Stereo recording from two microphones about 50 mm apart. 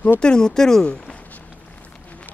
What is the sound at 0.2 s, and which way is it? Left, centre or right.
Speech, centre.